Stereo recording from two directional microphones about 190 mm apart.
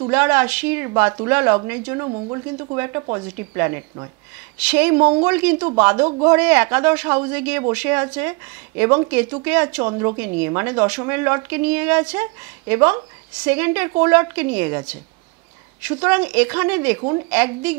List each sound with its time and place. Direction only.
0.1 s speech: 10° right (ahead or behind)
6.0 s speech: 25° right (ahead or behind)
6.3 s speech: 10° right (ahead or behind)